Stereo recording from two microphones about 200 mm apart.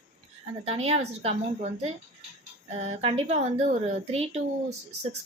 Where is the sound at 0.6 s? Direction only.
30° right (ahead or behind).